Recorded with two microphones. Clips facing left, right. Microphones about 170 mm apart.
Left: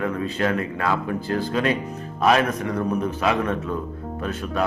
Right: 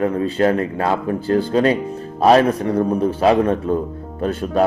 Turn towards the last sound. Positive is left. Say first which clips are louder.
# right 7 dB
turn(degrees=-35)  # may be behind; listen again after turning